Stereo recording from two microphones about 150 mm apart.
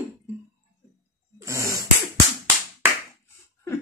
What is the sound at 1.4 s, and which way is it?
Sneeze, 20° right (ahead or behind).